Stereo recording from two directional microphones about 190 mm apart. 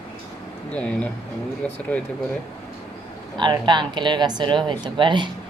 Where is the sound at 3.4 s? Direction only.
25° right (ahead or behind).